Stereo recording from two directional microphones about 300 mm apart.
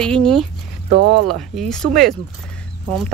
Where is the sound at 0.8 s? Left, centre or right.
Right.